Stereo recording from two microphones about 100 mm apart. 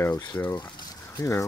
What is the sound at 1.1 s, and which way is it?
Speech, 30° left (ahead or behind).